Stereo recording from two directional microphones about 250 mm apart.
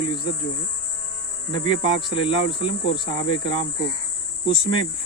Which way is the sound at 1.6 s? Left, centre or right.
Centre.